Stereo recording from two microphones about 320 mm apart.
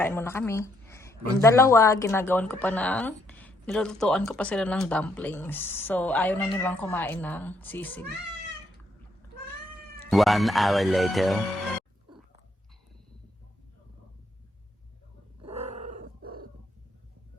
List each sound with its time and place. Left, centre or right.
0.0 s speech: centre
10.1 s speech: centre
15.4 s growling: centre